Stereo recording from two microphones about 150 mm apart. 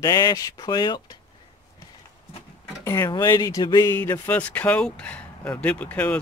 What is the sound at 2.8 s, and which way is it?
Speech, 20° left (ahead or behind).